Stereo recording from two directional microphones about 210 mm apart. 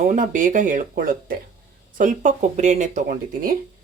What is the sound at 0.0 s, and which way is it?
Speech, 35° right (ahead or behind).